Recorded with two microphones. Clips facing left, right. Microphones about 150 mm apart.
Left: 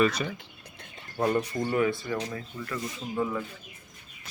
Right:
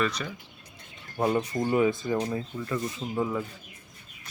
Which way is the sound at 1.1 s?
15° right (ahead or behind).